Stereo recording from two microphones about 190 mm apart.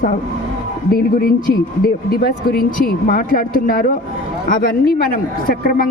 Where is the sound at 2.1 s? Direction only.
50° left (ahead or behind).